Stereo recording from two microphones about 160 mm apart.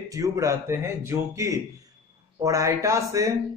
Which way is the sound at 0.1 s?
20° right (ahead or behind).